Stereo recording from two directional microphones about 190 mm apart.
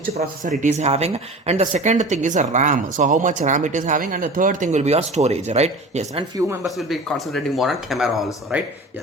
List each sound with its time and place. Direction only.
0.1 s speech: 35° right (ahead or behind)
6.6 s speech: centre (ahead or behind)